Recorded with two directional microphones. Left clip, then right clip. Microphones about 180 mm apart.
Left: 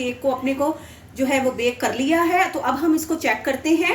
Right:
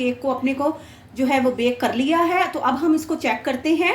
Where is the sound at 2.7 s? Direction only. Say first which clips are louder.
Even; 20° right (ahead or behind).